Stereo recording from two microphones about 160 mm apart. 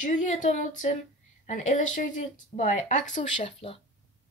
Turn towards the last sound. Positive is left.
turn(degrees=35)  # may be behind; listen again after turning